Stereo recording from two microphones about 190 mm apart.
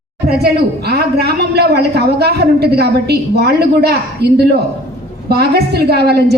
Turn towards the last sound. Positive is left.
turn(degrees=-60)  # may be behind; listen again after turning